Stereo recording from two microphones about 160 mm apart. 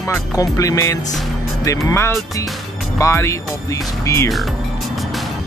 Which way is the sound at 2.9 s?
20° left (ahead or behind).